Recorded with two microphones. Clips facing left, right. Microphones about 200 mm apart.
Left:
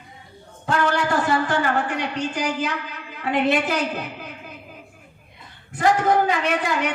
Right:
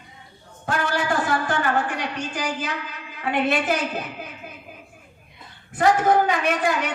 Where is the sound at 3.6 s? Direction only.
60° left (ahead or behind).